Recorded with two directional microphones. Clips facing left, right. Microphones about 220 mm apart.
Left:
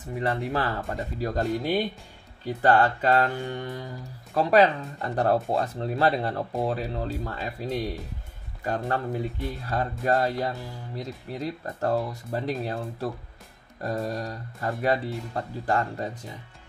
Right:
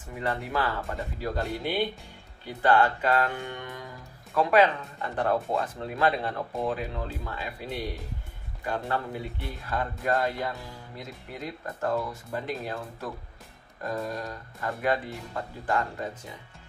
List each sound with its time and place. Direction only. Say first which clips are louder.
0.2 s speech: left 2 dB; 35° left (ahead or behind)